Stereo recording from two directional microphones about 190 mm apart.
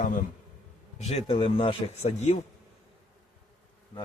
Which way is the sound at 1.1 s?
30° left (ahead or behind).